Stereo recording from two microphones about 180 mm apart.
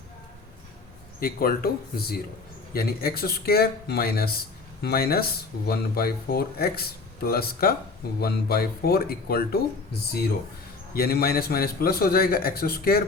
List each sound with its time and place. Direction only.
1.2 s speech: 55° left (ahead or behind)
10.9 s speech: 60° left (ahead or behind)